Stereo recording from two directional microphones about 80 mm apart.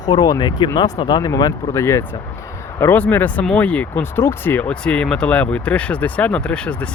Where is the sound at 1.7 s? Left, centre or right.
Left.